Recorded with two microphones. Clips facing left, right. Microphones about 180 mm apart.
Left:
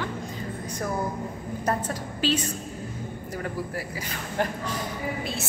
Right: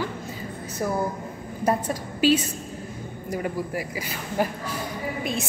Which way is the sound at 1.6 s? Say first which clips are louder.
Right 4 dB; 10° right (ahead or behind).